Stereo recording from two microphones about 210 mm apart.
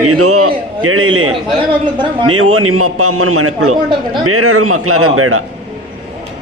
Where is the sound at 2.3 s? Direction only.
75° right (ahead or behind); by 5.4 s 90° right.